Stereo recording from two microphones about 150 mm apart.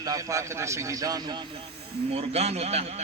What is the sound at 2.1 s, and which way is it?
Speech, 45° right (ahead or behind).